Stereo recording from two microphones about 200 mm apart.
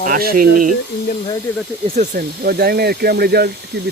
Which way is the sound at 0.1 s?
45° right (ahead or behind).